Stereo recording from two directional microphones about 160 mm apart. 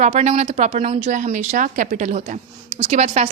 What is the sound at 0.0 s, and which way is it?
A woman's voice, 45° right (ahead or behind).